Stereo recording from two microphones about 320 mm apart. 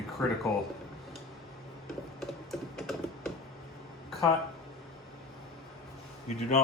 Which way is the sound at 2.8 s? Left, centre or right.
Centre.